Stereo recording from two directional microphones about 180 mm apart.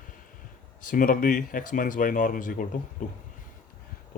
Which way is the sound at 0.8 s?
50° left (ahead or behind).